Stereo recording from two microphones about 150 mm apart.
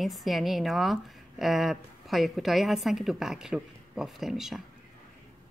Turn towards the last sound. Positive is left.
turn(degrees=0)  # may be behind; listen again after turning